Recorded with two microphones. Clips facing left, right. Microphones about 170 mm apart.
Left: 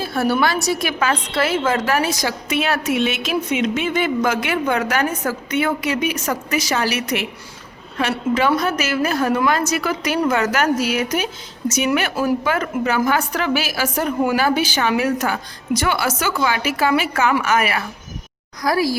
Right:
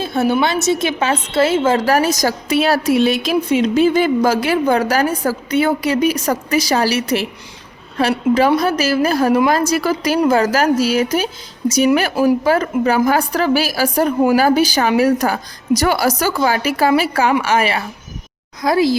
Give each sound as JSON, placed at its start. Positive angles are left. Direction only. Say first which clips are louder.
{"t": 0.0, "sound": "a woman's voice", "louder": "right 3 dB", "side_deg": -20}
{"t": 12.5, "sound": "a woman's voice", "louder": "right 5 dB", "side_deg": -35}